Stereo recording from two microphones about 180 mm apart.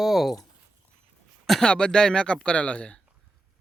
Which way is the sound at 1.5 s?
5° left (ahead or behind).